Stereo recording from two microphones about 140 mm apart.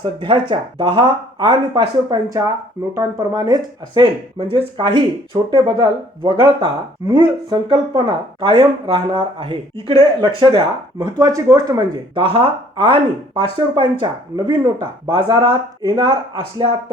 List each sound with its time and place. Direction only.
0.0 s speech: 35° right (ahead or behind)
2.9 s speech: 25° right (ahead or behind)